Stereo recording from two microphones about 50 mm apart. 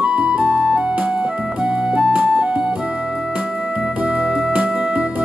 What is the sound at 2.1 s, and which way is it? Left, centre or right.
Music, right.